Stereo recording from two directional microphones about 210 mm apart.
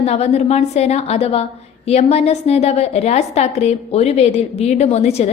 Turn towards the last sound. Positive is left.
turn(degrees=30)  # may be behind; listen again after turning